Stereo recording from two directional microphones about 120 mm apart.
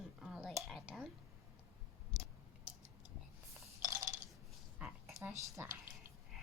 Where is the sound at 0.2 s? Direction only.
5° right (ahead or behind).